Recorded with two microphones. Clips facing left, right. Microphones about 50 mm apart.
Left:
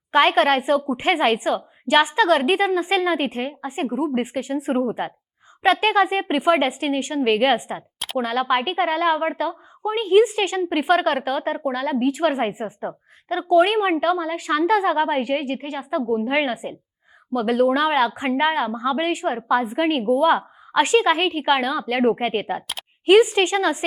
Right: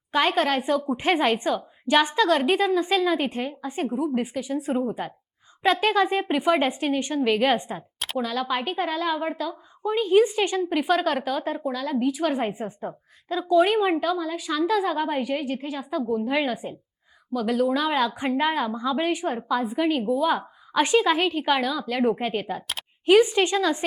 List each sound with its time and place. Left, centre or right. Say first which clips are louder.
0.1 s a woman's voice: left 5 dB; left
0.8 s a woman's voice: left 2 dB; centre
3.9 s a woman's voice: left 4 dB; left
7.9 s a sound: left 3 dB; centre
8.2 s a woman's voice: left 6 dB; left
9.8 s a woman's voice: left 3 dB; left
12.3 s a woman's voice: left 3 dB; left
14.0 s a woman's voice: left 4 dB; left
20.7 s a woman's voice: left 3 dB; left